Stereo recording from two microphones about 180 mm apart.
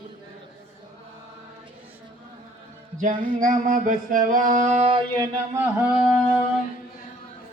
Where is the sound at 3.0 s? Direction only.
45° right (ahead or behind).